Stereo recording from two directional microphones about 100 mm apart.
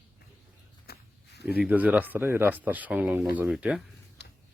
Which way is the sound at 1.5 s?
15° right (ahead or behind).